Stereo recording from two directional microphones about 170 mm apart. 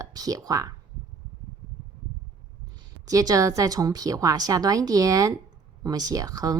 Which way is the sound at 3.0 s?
20° right (ahead or behind).